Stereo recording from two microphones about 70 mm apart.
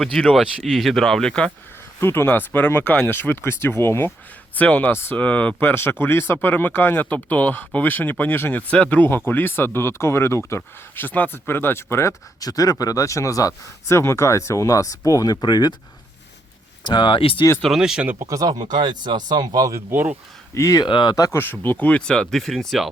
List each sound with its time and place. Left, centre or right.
0.0 s speech: centre
2.0 s speech: left
4.5 s speech: left
5.1 s speech: left
8.7 s speech: centre; by 12.1 s left
12.4 s speech: left
16.8 s speech: left
17.7 s speech: centre
18.3 s speech: right
19.9 s speech: right
20.5 s speech: left
20.8 s speech: left
21.3 s speech: left; by 22.9 s centre